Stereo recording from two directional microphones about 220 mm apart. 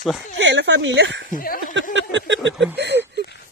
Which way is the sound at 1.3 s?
40° left (ahead or behind).